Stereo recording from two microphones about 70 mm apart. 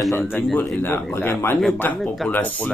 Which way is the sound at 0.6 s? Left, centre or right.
Left.